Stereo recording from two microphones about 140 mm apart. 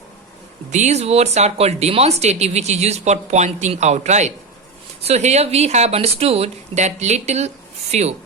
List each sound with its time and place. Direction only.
0.7 s speech: 55° right (ahead or behind)